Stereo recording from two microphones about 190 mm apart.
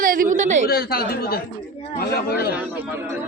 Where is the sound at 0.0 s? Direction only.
45° right (ahead or behind).